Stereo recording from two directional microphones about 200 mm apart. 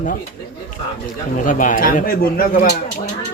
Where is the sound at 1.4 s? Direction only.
40° left (ahead or behind).